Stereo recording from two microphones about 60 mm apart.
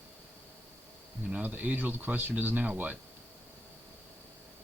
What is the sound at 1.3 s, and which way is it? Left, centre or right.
Speech, right.